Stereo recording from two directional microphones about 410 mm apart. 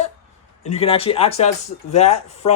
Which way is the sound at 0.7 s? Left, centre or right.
Centre.